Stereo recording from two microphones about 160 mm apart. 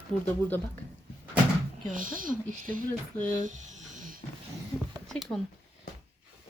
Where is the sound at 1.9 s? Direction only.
60° right (ahead or behind).